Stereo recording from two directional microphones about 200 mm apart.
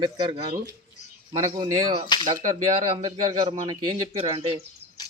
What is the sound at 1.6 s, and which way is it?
Speech, 25° right (ahead or behind).